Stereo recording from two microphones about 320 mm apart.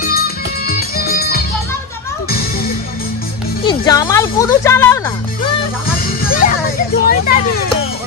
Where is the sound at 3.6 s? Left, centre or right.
Centre.